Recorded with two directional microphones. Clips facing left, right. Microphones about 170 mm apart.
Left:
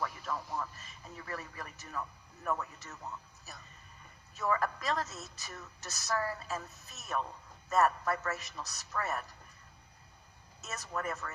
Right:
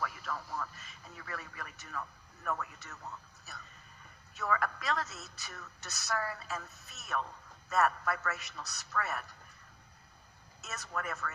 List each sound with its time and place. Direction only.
0.0 s radio: 25° left (ahead or behind)
2.4 s a sound: 25° left (ahead or behind)
4.4 s a man's voice: 30° left (ahead or behind)
7.7 s a man's voice: 35° left (ahead or behind)
10.7 s speech: 35° left (ahead or behind)